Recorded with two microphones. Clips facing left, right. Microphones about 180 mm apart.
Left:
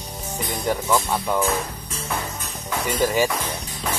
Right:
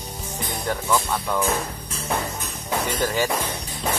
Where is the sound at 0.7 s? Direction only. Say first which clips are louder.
Left 2 dB; 10° left (ahead or behind).